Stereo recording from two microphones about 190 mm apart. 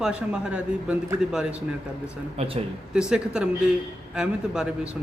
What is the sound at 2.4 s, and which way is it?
Speech, 30° right (ahead or behind).